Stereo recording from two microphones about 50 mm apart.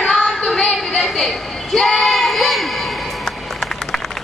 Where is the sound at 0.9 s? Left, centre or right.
Centre.